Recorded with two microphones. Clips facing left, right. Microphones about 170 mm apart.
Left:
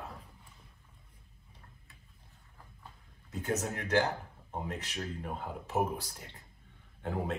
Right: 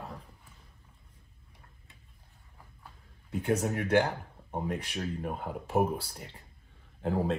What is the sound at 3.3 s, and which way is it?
Speech, 10° right (ahead or behind).